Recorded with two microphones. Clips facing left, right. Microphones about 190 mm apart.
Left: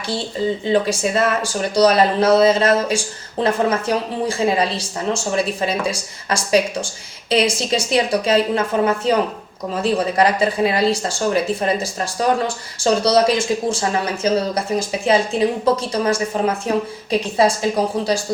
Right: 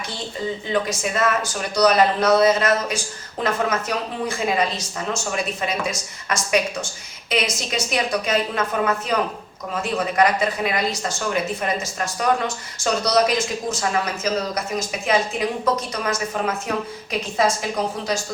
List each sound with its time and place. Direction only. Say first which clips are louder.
0.7 s speech: left 5 dB; 30° left (ahead or behind)